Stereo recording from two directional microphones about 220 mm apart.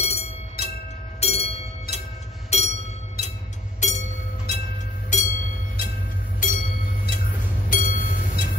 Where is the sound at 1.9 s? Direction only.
45° left (ahead or behind).